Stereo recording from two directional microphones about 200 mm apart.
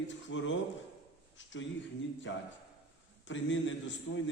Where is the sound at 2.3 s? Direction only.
70° left (ahead or behind).